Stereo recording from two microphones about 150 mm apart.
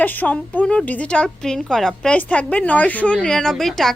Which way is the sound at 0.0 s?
10° left (ahead or behind).